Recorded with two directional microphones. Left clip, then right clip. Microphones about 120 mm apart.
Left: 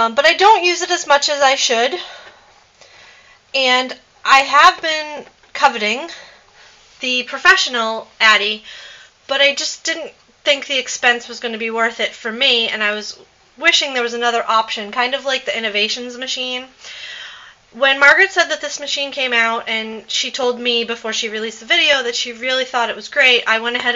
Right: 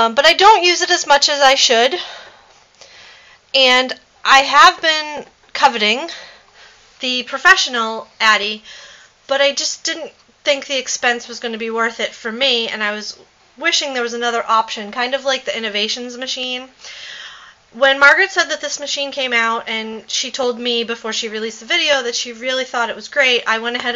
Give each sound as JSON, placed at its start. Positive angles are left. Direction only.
{"t": 0.0, "sound": "speech", "side_deg": -45}
{"t": 3.5, "sound": "speech", "side_deg": -45}